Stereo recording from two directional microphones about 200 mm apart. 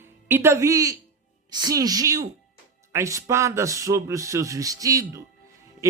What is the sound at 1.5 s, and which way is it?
Speech, 20° right (ahead or behind).